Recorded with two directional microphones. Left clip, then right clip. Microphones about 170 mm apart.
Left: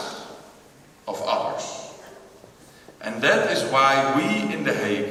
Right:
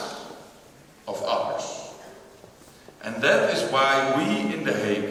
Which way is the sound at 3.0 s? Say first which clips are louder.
Left 1 dB; 20° left (ahead or behind).